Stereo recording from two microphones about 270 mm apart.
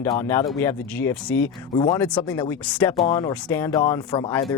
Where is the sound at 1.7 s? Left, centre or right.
Centre.